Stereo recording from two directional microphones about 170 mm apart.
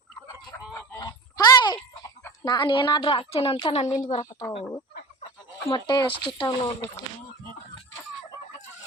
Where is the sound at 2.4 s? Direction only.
30° left (ahead or behind).